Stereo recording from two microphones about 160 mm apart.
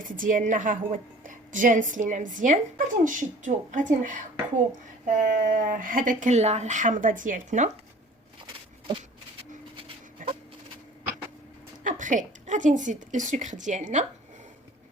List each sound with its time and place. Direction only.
0.0 s a woman's voice: 55° right (ahead or behind)
10.2 s fowl: 55° right (ahead or behind)
11.8 s a woman's voice: 50° right (ahead or behind)